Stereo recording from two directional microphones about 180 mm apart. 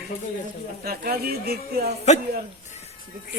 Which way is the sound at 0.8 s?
60° right (ahead or behind).